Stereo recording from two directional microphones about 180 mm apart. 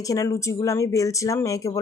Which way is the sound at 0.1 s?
15° left (ahead or behind).